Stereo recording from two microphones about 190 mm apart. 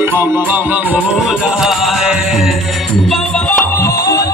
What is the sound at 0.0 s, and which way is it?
Music, 10° right (ahead or behind).